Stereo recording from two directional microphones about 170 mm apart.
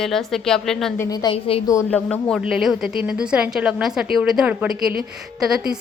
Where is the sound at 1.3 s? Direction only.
35° left (ahead or behind).